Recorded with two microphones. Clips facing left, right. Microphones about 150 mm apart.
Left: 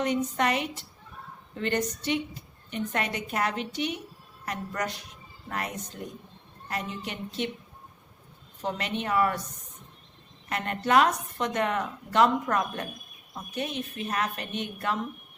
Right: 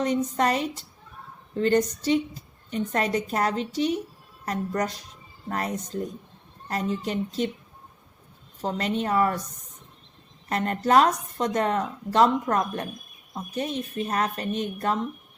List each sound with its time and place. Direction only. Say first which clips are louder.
0.0 s a woman's voice: right 3 dB; 35° right (ahead or behind)
8.6 s a woman's voice: right 4 dB; 35° right (ahead or behind)
10.5 s a woman's voice: right 3 dB; 35° right (ahead or behind)